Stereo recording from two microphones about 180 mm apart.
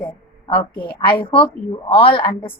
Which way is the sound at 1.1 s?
30° left (ahead or behind).